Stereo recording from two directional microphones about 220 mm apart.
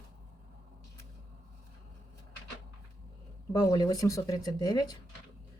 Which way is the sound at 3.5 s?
20° left (ahead or behind).